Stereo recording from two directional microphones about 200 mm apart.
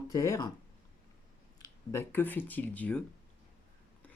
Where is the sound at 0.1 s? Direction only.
15° left (ahead or behind).